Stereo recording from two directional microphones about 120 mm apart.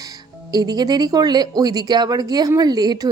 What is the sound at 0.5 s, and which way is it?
A woman's voice, 35° right (ahead or behind).